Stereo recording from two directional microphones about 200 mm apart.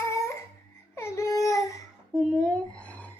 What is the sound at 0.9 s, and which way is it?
Baby cry, 15° left (ahead or behind).